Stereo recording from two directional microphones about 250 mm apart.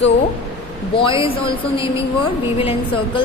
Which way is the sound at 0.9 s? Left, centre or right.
Left.